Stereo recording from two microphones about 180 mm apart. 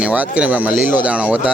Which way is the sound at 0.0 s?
5° right (ahead or behind).